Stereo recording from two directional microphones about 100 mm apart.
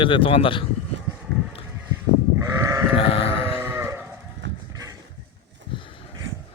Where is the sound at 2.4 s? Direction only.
30° right (ahead or behind).